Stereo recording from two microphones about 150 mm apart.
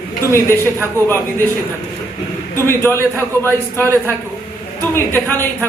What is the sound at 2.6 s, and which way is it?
A man's voice, 15° left (ahead or behind).